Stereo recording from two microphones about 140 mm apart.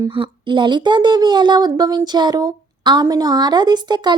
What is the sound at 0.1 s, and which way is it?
A woman's voice, 35° right (ahead or behind).